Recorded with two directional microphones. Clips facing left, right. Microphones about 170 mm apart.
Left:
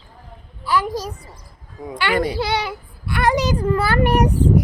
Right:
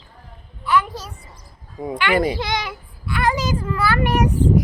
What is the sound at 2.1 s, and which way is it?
Speech, 10° right (ahead or behind).